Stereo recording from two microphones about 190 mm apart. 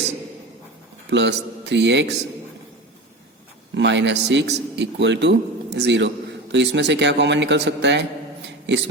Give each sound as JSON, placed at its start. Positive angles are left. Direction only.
{"t": 1.1, "sound": "speech", "side_deg": -65}
{"t": 3.8, "sound": "speech", "side_deg": -70}
{"t": 8.4, "sound": "a sound", "side_deg": -65}